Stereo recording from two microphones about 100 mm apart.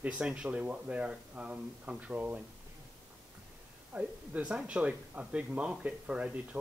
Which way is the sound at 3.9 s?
10° right (ahead or behind).